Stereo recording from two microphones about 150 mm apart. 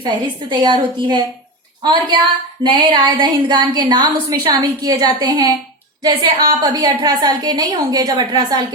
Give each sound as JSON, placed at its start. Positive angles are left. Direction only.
{"t": 0.0, "sound": "a woman's voice", "side_deg": -30}